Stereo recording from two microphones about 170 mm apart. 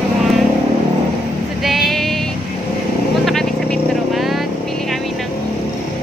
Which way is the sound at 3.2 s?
Centre (ahead or behind).